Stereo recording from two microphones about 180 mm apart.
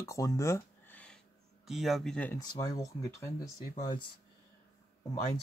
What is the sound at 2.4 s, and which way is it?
Speech, 20° left (ahead or behind).